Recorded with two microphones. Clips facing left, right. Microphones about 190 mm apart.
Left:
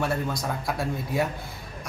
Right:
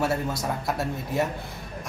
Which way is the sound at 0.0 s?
5° right (ahead or behind).